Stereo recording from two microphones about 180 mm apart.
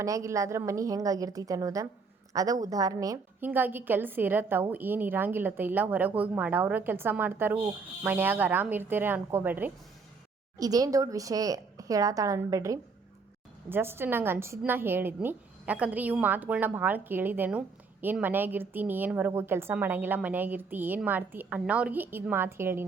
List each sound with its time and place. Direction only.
0.0 s a woman's voice: 15° right (ahead or behind)